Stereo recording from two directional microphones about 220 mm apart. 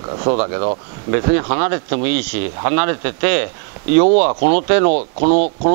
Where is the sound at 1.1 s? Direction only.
15° right (ahead or behind).